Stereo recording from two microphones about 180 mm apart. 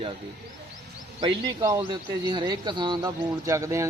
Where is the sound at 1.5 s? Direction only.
20° right (ahead or behind).